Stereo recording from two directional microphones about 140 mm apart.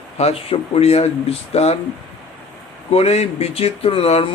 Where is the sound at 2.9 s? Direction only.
50° left (ahead or behind).